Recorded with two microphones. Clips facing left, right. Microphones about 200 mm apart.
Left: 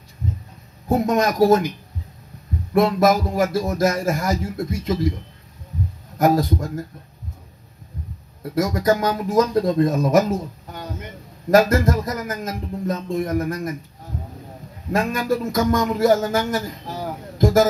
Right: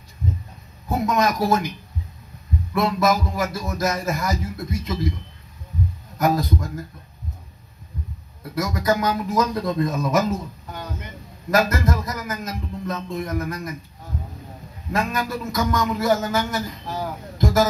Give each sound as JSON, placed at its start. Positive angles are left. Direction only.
{"t": 0.8, "sound": "music", "side_deg": 45}
{"t": 2.7, "sound": "music", "side_deg": 45}
{"t": 6.1, "sound": "music", "side_deg": 50}
{"t": 8.4, "sound": "music", "side_deg": 50}
{"t": 11.5, "sound": "music", "side_deg": 45}
{"t": 14.9, "sound": "music", "side_deg": 45}
{"t": 17.4, "sound": "a sound", "side_deg": 50}